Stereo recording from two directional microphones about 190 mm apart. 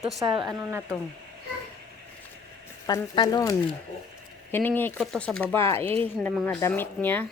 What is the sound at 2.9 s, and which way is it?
Speech, 20° left (ahead or behind).